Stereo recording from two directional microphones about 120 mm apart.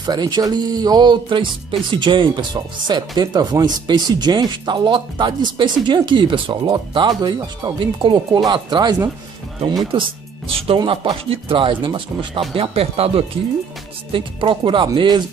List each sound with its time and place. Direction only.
0.0 s speech: 35° right (ahead or behind)
7.8 s speech: 45° right (ahead or behind)
10.8 s speech: 35° right (ahead or behind)
11.2 s speech: 45° right (ahead or behind)